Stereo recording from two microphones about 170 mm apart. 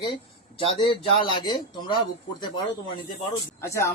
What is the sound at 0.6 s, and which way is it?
A man's voice, 35° left (ahead or behind).